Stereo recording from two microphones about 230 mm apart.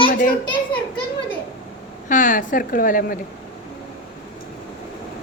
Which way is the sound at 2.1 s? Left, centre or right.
Left.